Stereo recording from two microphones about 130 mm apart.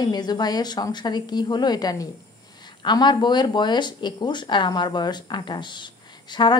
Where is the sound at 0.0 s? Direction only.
30° left (ahead or behind).